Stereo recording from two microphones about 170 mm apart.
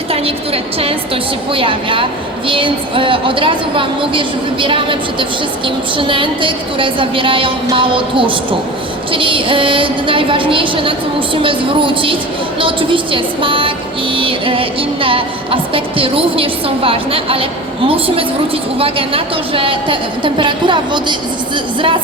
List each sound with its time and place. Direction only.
0.1 s music: 35° right (ahead or behind)
18.8 s a woman's voice: 30° right (ahead or behind)